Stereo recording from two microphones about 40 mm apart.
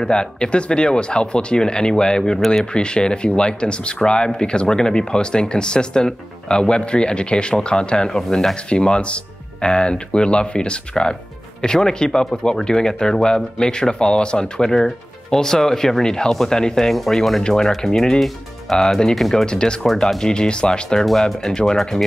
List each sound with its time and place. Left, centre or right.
0.0 s speech: left
16.9 s speech: centre
17.4 s speech: centre
19.4 s speech: left
21.3 s speech: centre